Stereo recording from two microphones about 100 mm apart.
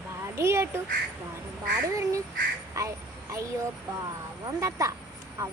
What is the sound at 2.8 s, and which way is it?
Speech, 35° right (ahead or behind).